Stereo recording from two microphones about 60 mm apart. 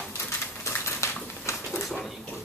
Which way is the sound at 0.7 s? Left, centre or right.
Left.